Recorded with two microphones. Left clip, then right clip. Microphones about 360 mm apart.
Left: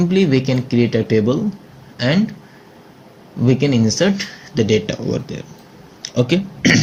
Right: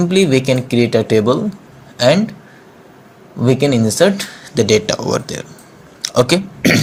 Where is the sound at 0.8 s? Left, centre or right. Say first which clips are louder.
Right 5 dB; right.